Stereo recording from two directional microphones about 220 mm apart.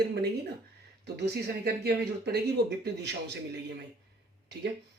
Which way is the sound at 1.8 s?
45° right (ahead or behind).